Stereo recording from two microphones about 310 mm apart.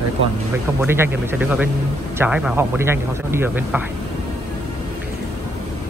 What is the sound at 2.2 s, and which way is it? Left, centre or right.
Speech, centre.